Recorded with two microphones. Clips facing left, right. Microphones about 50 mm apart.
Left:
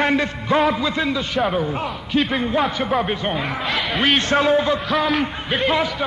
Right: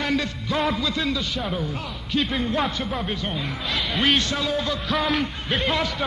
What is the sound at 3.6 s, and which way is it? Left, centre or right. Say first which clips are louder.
Speech: left 2 dB; centre.